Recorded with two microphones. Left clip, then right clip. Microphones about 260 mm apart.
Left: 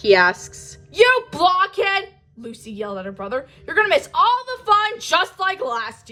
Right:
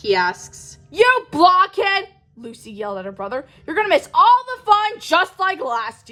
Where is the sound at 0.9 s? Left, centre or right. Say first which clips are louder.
Even; right.